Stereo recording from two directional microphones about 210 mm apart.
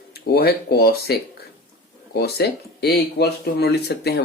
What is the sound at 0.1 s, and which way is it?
Speech, 45° left (ahead or behind).